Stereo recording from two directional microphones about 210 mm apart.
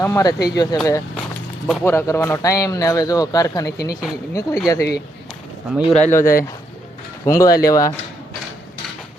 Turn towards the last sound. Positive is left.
turn(degrees=15)  # may be behind; listen again after turning